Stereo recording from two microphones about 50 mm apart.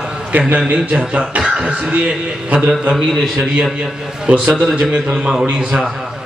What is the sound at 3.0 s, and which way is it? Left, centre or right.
Speech, centre.